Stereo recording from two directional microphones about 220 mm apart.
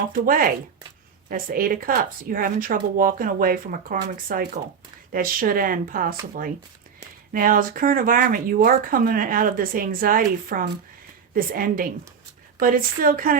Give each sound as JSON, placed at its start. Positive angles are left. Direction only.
{"t": 0.1, "sound": "speech", "side_deg": -40}